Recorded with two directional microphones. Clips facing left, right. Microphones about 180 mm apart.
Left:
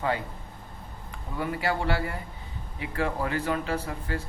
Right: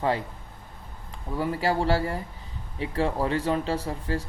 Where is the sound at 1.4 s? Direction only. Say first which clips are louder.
Right 3 dB; 35° right (ahead or behind).